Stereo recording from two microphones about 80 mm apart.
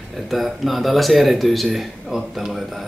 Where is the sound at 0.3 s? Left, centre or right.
Centre.